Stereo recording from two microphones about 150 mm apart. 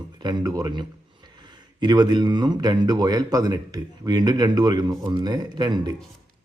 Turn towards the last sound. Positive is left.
turn(degrees=-30)  # may be behind; listen again after turning